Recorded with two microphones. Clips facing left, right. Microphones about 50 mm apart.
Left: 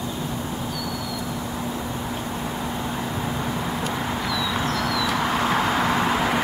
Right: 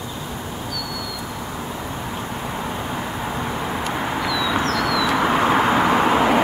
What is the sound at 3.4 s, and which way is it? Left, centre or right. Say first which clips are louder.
Vehicle: right 2 dB; right.